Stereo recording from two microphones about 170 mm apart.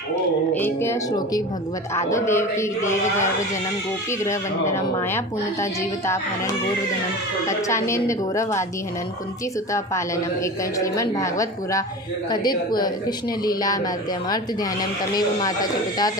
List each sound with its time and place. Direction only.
0.5 s speech: 15° left (ahead or behind)
4.3 s speech: 15° left (ahead or behind)
7.4 s speech: 15° left (ahead or behind)
10.4 s speech: 20° left (ahead or behind)